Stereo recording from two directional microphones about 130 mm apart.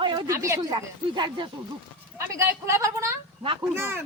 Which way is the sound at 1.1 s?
35° right (ahead or behind).